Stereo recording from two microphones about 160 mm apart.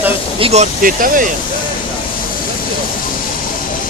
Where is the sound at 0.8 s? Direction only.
60° right (ahead or behind).